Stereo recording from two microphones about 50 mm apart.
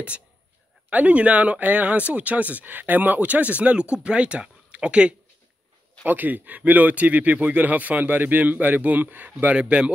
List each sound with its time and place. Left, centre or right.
0.8 s speech: right
6.0 s speech: right
9.6 s speech: right